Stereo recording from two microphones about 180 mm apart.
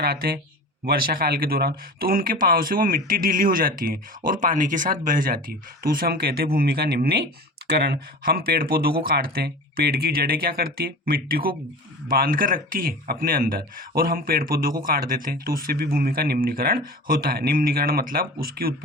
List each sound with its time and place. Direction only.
0.0 s speech: 60° right (ahead or behind)